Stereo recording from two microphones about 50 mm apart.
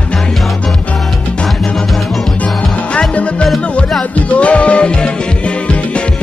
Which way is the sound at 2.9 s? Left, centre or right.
Left.